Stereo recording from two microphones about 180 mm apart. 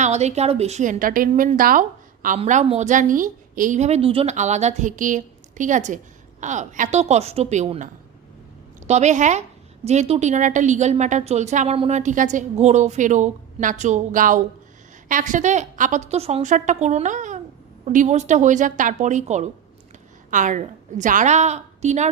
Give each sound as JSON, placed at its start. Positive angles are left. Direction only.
{"t": 0.0, "sound": "a woman's voice", "side_deg": -40}
{"t": 2.4, "sound": "a woman's voice", "side_deg": -35}
{"t": 8.9, "sound": "a woman's voice", "side_deg": -40}